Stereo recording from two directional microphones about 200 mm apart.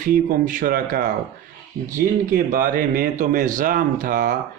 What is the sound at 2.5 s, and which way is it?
Mantra, 40° right (ahead or behind).